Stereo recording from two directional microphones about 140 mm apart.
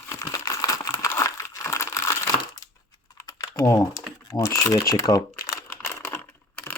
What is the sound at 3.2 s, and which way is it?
Typing, 25° left (ahead or behind).